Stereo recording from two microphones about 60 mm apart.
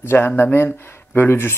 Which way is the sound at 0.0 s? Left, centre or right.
Left.